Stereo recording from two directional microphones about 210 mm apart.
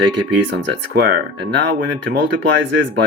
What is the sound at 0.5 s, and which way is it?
Speech, 55° right (ahead or behind).